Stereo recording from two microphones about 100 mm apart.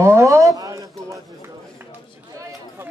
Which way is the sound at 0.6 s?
35° right (ahead or behind).